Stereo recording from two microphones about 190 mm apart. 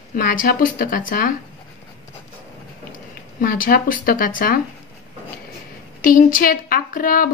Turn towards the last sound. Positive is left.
turn(degrees=50)  # may be behind; listen again after turning